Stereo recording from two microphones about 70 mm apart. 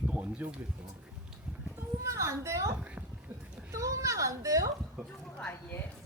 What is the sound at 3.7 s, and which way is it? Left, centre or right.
Speech, right.